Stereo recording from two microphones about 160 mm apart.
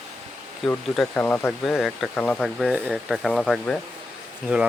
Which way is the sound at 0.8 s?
Centre (ahead or behind).